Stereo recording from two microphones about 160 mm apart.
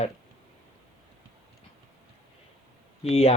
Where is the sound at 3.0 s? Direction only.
40° left (ahead or behind).